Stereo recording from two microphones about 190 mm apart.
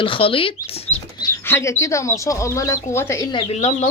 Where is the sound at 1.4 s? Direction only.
15° left (ahead or behind); by 3.9 s 35° left (ahead or behind).